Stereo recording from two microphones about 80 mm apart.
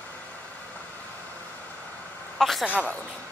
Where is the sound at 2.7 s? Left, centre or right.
Centre.